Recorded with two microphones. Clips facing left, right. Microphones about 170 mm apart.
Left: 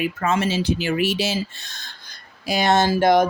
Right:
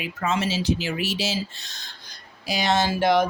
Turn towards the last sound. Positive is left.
turn(degrees=45)  # may be behind; listen again after turning